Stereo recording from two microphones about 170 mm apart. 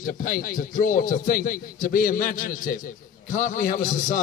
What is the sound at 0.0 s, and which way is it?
A man's voice, 55° left (ahead or behind).